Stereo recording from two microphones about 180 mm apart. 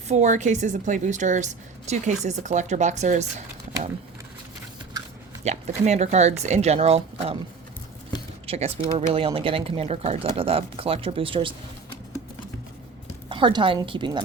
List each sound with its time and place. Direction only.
0.1 s speech: 40° right (ahead or behind)
5.5 s speech: 40° right (ahead or behind)
8.4 s speech: 35° right (ahead or behind)
13.2 s a woman's voice: 30° right (ahead or behind)